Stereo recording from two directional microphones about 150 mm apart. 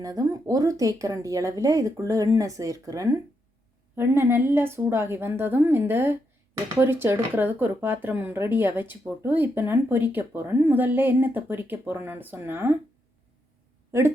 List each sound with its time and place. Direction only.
0.0 s speech: 25° right (ahead or behind)